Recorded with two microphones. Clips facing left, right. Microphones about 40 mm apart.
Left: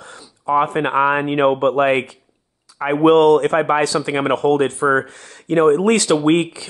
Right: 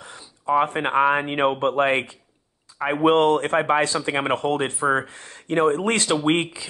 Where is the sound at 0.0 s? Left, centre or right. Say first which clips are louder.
Left 3 dB; right.